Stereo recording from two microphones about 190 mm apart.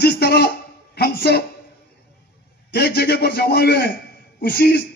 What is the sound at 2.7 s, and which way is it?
A man's voice, 60° left (ahead or behind).